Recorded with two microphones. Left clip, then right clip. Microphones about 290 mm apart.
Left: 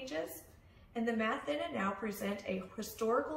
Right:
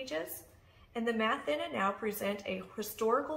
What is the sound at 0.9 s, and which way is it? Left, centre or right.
Speech, centre.